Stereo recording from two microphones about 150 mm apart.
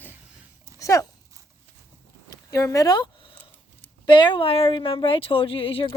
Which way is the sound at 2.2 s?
20° left (ahead or behind).